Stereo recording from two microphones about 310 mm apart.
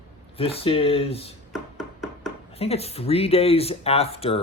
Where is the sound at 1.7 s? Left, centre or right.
Centre.